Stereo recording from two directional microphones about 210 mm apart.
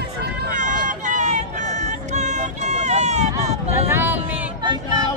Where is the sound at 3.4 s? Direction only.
15° right (ahead or behind).